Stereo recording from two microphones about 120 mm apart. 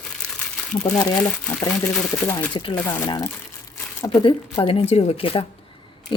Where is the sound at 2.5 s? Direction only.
45° left (ahead or behind).